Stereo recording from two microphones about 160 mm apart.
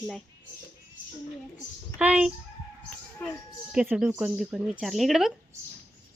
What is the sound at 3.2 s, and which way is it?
Speech, 10° left (ahead or behind).